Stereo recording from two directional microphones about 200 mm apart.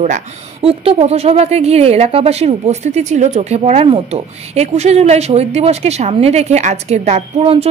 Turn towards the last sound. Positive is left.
turn(degrees=-30)  # may be behind; listen again after turning